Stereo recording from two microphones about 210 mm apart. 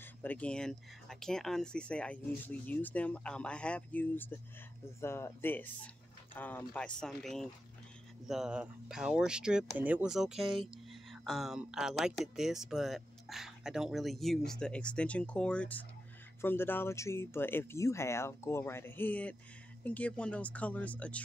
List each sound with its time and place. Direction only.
0.0 s speech: 10° left (ahead or behind)